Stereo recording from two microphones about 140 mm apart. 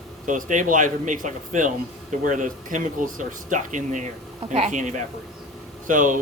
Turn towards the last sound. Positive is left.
turn(degrees=-70)  # may be behind; listen again after turning